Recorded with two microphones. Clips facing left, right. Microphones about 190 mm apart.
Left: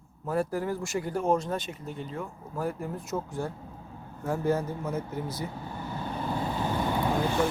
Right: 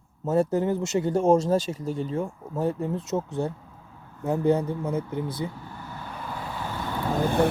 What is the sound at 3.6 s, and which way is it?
Vehicle, 35° left (ahead or behind).